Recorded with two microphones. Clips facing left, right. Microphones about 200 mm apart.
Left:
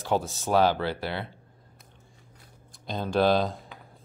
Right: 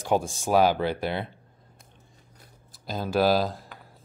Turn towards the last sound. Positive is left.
turn(degrees=0)  # may be behind; listen again after turning